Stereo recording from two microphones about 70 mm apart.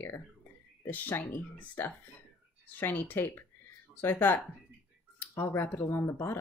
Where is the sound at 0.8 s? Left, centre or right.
Left.